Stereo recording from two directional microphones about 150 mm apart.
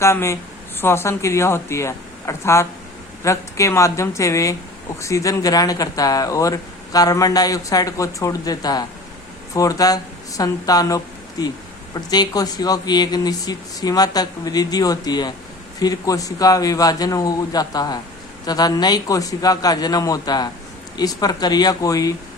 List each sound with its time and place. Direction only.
0.0 s speech: 20° left (ahead or behind)